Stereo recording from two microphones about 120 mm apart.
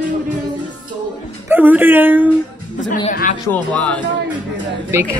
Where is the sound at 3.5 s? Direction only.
10° left (ahead or behind).